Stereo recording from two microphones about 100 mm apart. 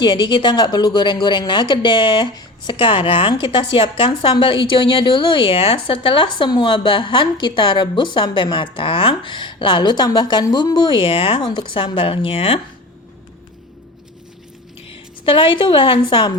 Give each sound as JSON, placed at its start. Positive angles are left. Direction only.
{"t": 0.0, "sound": "a woman's voice", "side_deg": 50}
{"t": 14.8, "sound": "a woman's voice", "side_deg": 65}